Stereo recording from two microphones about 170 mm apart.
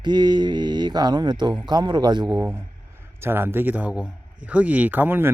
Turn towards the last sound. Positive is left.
turn(degrees=-10)  # may be behind; listen again after turning